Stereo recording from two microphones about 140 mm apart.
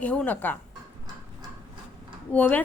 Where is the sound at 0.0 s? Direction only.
10° left (ahead or behind).